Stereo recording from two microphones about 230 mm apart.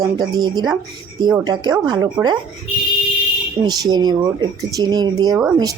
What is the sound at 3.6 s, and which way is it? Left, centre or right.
Speech, centre.